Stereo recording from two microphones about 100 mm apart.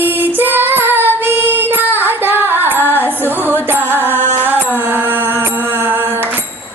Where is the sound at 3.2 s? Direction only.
20° right (ahead or behind).